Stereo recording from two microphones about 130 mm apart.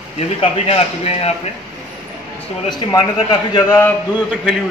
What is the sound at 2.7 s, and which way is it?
Speech, 35° left (ahead or behind).